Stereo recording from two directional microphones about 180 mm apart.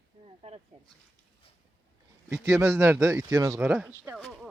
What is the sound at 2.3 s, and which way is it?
Speech, 15° right (ahead or behind).